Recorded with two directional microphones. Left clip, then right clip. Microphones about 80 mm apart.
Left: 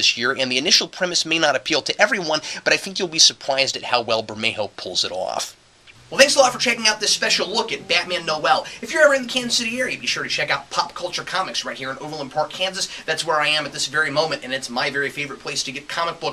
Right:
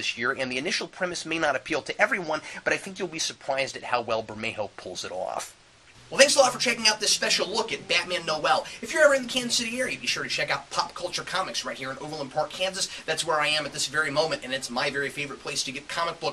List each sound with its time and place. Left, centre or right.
0.2 s speech: left
6.1 s speech: centre